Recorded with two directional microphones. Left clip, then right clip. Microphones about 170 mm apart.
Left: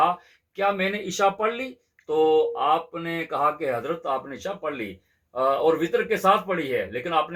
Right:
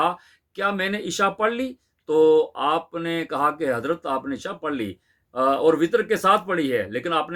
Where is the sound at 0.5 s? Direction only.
45° right (ahead or behind).